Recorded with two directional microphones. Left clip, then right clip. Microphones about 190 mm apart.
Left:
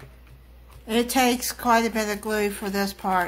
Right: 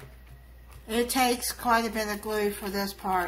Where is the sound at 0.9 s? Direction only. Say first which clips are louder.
Left 4 dB; 45° left (ahead or behind).